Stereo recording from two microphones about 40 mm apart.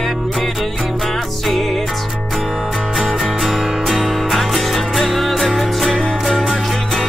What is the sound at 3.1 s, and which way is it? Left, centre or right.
Music, centre.